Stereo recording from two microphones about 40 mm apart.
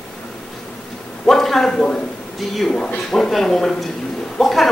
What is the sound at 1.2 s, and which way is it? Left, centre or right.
A man's voice, centre.